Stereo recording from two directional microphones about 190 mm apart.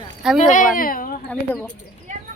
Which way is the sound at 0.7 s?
50° left (ahead or behind).